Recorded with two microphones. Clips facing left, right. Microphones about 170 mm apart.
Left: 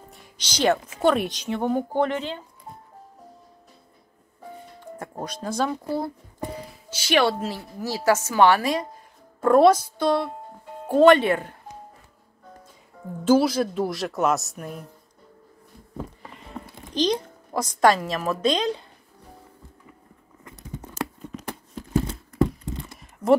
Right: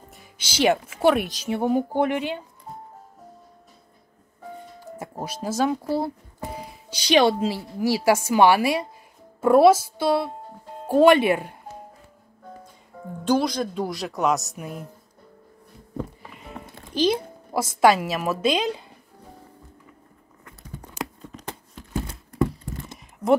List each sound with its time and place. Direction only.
0.5 s speech: 10° right (ahead or behind)
4.9 s speech: 5° right (ahead or behind)
13.2 s speech: 5° left (ahead or behind)
16.9 s speech: 5° right (ahead or behind)
20.4 s a sound: 20° left (ahead or behind)
22.4 s a sound: 20° left (ahead or behind)